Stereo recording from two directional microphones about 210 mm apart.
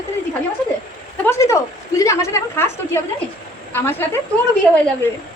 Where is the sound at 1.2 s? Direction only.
15° left (ahead or behind).